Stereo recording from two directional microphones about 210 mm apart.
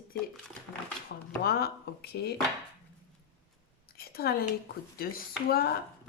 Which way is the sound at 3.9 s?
45° left (ahead or behind).